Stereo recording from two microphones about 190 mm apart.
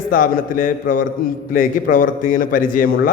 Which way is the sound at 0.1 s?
45° left (ahead or behind).